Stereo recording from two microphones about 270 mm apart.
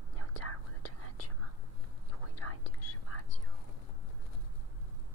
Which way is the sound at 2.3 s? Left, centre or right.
Left.